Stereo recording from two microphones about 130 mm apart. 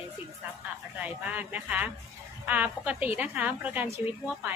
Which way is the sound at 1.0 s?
10° right (ahead or behind).